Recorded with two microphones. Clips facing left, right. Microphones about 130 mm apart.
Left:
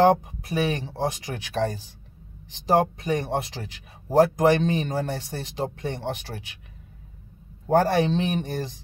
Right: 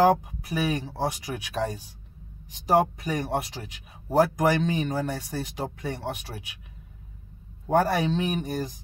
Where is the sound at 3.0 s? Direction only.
25° left (ahead or behind).